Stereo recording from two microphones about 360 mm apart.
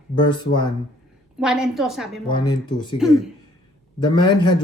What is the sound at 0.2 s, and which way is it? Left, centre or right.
Speech, centre.